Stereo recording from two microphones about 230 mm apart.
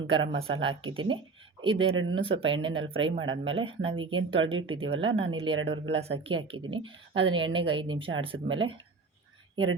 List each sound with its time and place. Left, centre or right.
0.1 s speech: right